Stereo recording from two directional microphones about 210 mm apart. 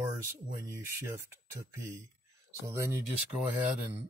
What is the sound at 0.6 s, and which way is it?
Speech, 15° right (ahead or behind).